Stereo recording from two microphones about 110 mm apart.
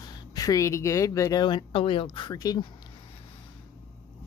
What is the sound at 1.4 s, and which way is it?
Speech, 50° left (ahead or behind).